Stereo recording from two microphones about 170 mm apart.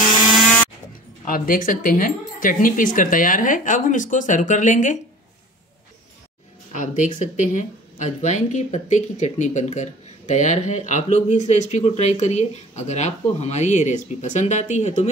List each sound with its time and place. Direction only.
1.2 s speech: 55° left (ahead or behind)
6.7 s speech: 50° left (ahead or behind)